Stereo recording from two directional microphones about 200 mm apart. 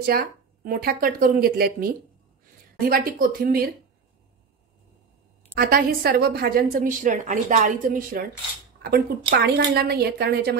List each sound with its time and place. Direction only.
0.0 s a woman's voice: 45° right (ahead or behind)
5.5 s a woman's voice: 50° right (ahead or behind)